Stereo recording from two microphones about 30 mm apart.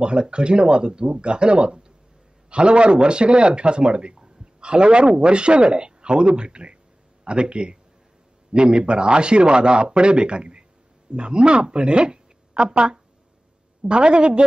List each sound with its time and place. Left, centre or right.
0.0 s a man's voice: right